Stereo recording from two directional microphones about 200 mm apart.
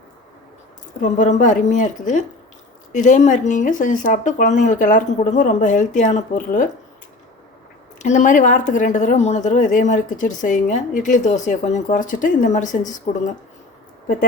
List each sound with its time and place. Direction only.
1.2 s speech: 40° left (ahead or behind)
7.9 s speech: 35° left (ahead or behind)